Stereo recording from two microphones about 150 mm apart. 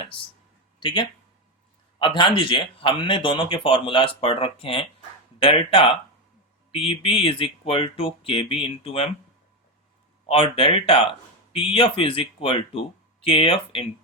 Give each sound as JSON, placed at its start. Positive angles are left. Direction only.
{"t": 0.8, "sound": "a man's voice", "side_deg": 35}
{"t": 10.2, "sound": "a man's voice", "side_deg": 40}